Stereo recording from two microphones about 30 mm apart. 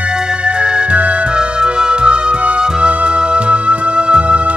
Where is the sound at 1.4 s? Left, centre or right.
Right.